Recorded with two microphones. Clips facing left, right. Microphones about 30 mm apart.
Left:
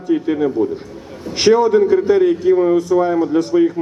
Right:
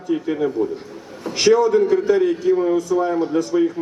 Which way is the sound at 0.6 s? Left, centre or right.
Left.